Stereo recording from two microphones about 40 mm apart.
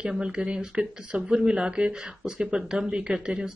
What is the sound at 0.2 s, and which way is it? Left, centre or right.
Speech, right.